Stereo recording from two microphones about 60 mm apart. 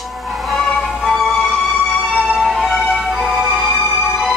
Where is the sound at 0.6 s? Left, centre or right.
Centre.